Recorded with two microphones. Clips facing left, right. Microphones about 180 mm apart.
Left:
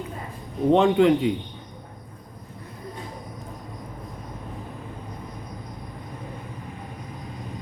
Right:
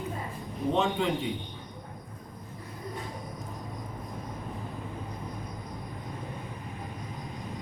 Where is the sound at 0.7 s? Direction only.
65° left (ahead or behind).